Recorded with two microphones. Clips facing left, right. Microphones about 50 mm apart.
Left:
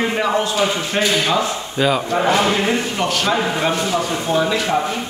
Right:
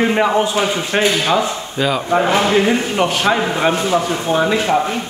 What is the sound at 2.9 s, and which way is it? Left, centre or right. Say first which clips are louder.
A man's voice: right 3 dB; centre.